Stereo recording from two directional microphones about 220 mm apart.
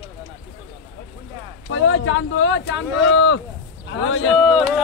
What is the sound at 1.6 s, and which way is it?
Speech, 65° left (ahead or behind).